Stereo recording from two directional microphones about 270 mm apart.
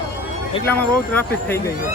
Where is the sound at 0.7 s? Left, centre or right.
Centre.